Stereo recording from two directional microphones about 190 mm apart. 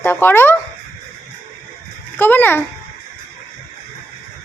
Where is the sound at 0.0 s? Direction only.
10° left (ahead or behind).